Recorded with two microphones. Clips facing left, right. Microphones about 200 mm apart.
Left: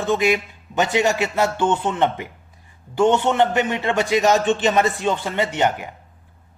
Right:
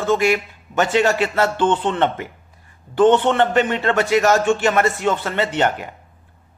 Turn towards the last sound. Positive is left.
turn(degrees=15)  # may be behind; listen again after turning